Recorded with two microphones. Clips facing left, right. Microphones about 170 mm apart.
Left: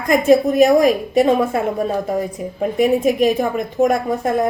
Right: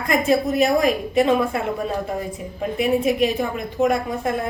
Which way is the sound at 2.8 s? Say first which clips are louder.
Left 4 dB; 45° left (ahead or behind).